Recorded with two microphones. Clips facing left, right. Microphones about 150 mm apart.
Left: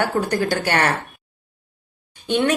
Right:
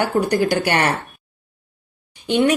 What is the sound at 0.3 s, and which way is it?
Speech, 15° right (ahead or behind).